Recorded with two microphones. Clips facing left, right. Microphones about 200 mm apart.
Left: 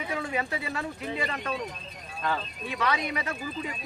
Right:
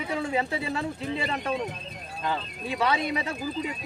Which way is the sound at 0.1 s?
25° right (ahead or behind).